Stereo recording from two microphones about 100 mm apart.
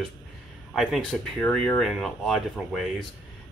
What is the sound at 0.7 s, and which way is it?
Speech, centre (ahead or behind).